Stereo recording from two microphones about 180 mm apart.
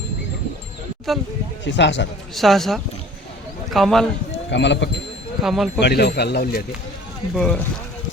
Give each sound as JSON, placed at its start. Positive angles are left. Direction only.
{"t": 1.1, "sound": "speech", "side_deg": 0}
{"t": 1.6, "sound": "a man's voice", "side_deg": 80}
{"t": 2.3, "sound": "speech", "side_deg": 0}
{"t": 4.3, "sound": "run", "side_deg": 80}
{"t": 5.4, "sound": "speech", "side_deg": 0}
{"t": 5.8, "sound": "speech", "side_deg": 65}
{"t": 7.3, "sound": "speech", "side_deg": 5}